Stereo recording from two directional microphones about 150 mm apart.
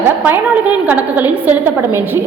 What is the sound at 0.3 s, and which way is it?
A woman's voice, 10° right (ahead or behind).